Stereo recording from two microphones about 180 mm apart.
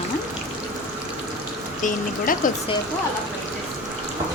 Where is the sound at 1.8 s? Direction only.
45° left (ahead or behind).